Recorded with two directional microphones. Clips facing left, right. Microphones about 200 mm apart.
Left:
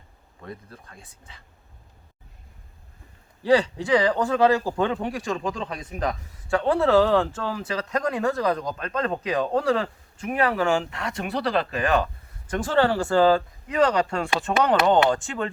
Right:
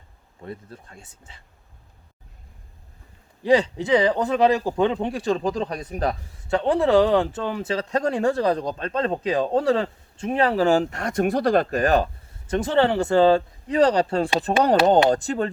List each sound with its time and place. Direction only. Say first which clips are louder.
0.4 s speech: right 3 dB; 25° right (ahead or behind)
3.4 s speech: right 1 dB; 20° right (ahead or behind)
6.5 s speech: right 1 dB; 20° right (ahead or behind); by 12.1 s 40° right (ahead or behind)
12.5 s speech: right 2 dB; 25° right (ahead or behind); by 15.4 s 40° right (ahead or behind)